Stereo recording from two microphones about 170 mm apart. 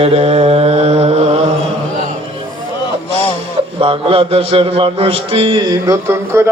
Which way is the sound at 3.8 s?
35° right (ahead or behind).